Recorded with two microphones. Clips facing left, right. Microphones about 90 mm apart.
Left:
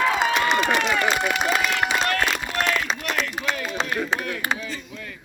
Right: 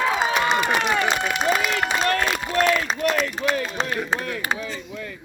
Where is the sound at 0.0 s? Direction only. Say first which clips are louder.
Even; 15° right (ahead or behind).